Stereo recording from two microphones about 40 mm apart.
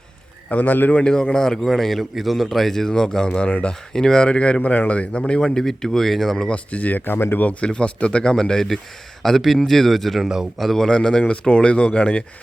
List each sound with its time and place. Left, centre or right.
0.6 s speech: left
1.0 s speech: left
4.3 s speech: left; by 6.3 s centre
6.5 s speech: left
7.0 s speech: left
7.6 s speech: left; by 10.2 s centre
10.8 s speech: centre